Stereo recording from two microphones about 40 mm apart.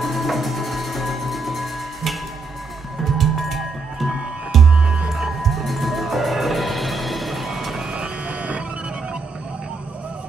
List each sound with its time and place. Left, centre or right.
0.0 s music: centre
4.7 s music: centre
5.1 s music: centre
8.3 s printer: right